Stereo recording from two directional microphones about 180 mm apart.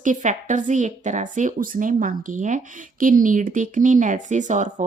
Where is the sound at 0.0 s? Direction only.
45° right (ahead or behind).